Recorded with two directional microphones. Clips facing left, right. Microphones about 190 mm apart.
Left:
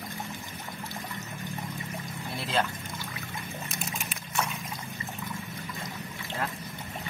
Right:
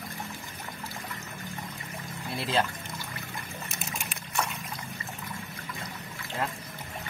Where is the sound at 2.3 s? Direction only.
Centre (ahead or behind).